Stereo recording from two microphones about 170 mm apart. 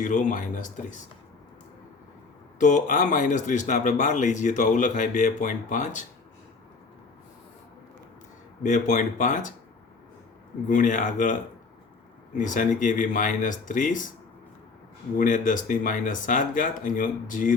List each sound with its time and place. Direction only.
0.0 s speech: 50° left (ahead or behind)
2.6 s speech: 50° left (ahead or behind)
8.6 s speech: 45° left (ahead or behind)
10.7 s speech: 50° left (ahead or behind)
12.4 s speech: 50° left (ahead or behind)
15.2 s speech: 50° left (ahead or behind)